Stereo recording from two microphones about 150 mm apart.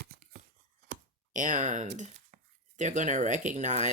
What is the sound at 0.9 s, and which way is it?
Speech, 60° right (ahead or behind).